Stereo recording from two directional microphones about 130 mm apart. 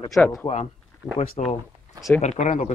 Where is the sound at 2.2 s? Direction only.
65° left (ahead or behind).